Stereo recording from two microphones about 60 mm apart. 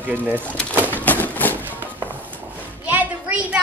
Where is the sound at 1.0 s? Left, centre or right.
Left.